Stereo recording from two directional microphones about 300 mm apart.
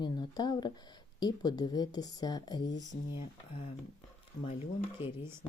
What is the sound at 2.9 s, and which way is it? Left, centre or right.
Speech, left.